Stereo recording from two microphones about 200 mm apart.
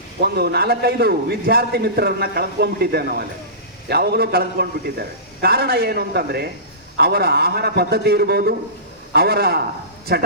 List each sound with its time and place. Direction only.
0.2 s a man's voice: 50° right (ahead or behind)